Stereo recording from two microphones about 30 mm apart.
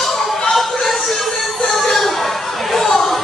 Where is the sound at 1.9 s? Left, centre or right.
Centre.